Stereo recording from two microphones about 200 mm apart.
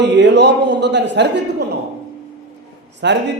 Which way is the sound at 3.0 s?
55° right (ahead or behind).